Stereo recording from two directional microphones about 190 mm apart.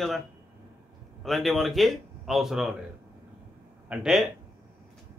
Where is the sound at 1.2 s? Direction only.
Centre (ahead or behind).